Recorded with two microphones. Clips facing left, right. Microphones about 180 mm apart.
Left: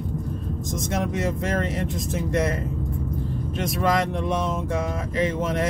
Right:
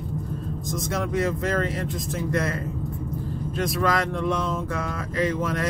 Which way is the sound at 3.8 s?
20° left (ahead or behind).